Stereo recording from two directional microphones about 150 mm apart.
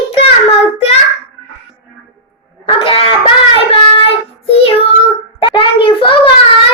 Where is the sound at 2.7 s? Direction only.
40° left (ahead or behind).